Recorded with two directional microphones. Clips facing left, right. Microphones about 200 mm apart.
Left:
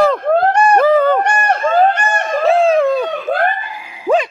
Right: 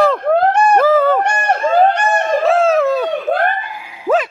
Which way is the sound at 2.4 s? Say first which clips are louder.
Left 3 dB; centre (ahead or behind).